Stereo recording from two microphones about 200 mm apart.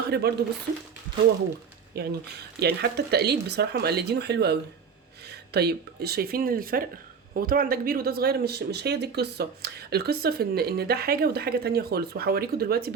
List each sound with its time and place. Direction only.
0.1 s speech: 55° right (ahead or behind)
2.0 s speech: 55° right (ahead or behind)